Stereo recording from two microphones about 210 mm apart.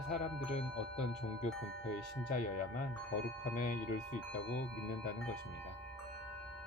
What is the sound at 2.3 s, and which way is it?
Speech, 35° left (ahead or behind).